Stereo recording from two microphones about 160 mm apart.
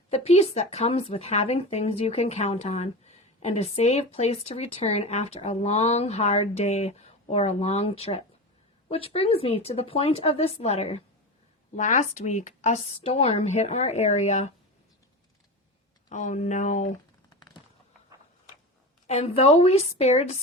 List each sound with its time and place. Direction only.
0.1 s speech: 40° left (ahead or behind)
11.8 s a woman's voice: 50° left (ahead or behind)
16.0 s a woman's voice: 50° left (ahead or behind)
19.0 s speech: 40° left (ahead or behind)